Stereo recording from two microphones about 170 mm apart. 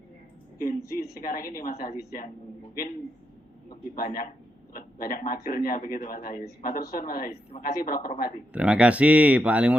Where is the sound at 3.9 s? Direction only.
55° left (ahead or behind).